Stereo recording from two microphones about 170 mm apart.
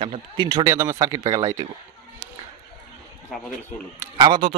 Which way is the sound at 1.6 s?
30° right (ahead or behind).